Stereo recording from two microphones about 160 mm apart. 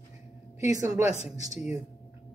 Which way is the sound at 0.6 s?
20° right (ahead or behind).